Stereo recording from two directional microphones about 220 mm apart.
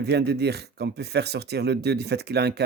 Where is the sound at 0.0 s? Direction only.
50° right (ahead or behind).